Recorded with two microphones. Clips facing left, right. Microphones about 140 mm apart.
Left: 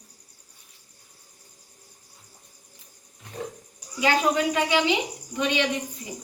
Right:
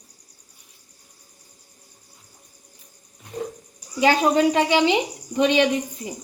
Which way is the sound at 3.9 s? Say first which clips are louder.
Right 5 dB; 25° right (ahead or behind).